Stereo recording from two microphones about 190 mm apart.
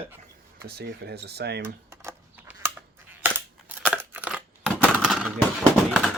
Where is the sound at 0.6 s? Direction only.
60° right (ahead or behind).